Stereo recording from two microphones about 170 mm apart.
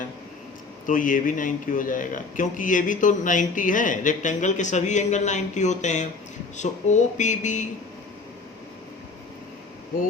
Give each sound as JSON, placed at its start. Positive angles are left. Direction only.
{"t": 0.9, "sound": "a man's voice", "side_deg": 50}